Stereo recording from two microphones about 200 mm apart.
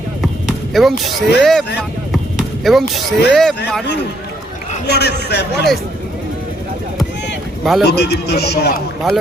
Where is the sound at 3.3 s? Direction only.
Centre (ahead or behind).